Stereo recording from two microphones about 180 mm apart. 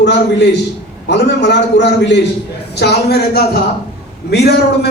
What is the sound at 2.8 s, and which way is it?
A man's voice, 65° left (ahead or behind).